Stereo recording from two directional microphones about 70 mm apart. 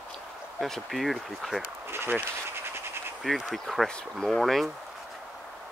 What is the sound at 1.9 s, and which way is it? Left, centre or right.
Insect, right.